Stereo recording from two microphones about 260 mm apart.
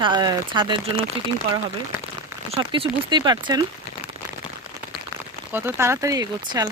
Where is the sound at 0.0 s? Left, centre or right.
Centre.